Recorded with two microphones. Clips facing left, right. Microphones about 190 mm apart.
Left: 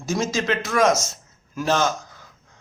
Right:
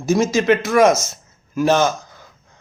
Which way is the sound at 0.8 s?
55° right (ahead or behind).